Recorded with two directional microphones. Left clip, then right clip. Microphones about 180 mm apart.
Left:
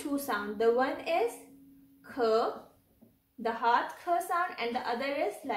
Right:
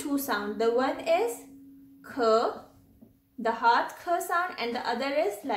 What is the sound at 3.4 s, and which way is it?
A woman's voice, 20° right (ahead or behind).